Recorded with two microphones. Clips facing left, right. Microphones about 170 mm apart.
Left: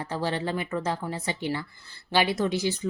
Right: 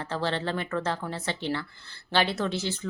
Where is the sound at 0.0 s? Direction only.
10° left (ahead or behind).